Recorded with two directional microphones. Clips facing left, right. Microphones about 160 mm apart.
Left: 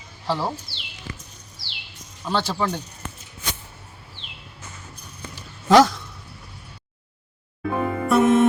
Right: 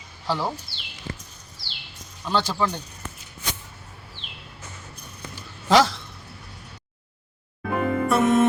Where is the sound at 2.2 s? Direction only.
5° left (ahead or behind).